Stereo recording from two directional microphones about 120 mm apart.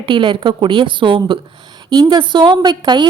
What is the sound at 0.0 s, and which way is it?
A woman's voice, 45° right (ahead or behind).